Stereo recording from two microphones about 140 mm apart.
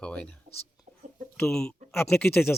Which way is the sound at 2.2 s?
15° left (ahead or behind).